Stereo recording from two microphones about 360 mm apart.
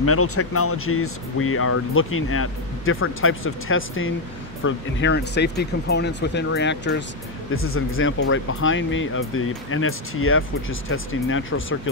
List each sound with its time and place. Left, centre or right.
0.0 s speech: left